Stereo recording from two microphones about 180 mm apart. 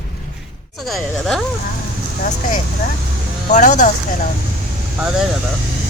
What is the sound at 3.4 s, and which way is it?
Speech, 40° left (ahead or behind).